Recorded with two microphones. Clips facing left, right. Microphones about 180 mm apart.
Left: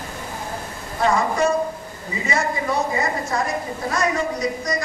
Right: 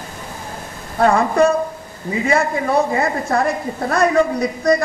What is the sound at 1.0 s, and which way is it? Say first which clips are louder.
Speech: right 6 dB; 55° right (ahead or behind).